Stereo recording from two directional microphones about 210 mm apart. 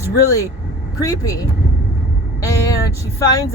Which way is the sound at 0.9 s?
15° left (ahead or behind).